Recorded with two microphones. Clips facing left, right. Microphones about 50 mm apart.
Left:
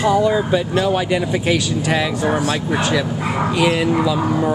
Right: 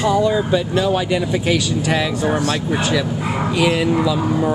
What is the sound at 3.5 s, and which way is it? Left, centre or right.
Speech, centre.